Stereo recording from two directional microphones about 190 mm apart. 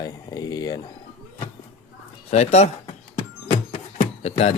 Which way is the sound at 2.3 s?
35° left (ahead or behind).